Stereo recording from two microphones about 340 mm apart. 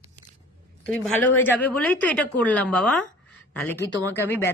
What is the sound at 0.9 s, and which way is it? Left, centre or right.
Speech, centre.